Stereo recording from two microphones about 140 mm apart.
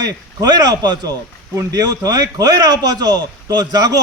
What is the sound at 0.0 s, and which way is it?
A man's voice, 25° right (ahead or behind).